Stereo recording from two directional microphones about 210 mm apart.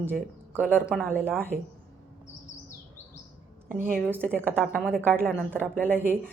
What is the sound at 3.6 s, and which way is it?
Speech, 40° right (ahead or behind).